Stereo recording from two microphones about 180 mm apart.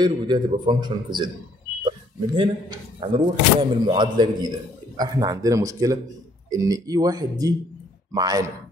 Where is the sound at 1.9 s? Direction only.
30° right (ahead or behind).